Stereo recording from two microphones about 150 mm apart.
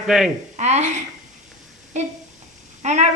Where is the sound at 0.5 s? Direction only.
50° right (ahead or behind).